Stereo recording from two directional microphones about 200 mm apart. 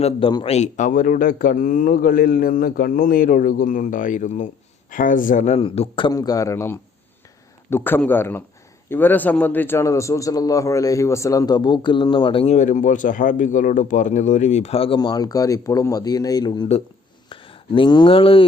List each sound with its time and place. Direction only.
0.0 s a man's voice: 25° left (ahead or behind)
6.1 s a man's voice: 15° left (ahead or behind)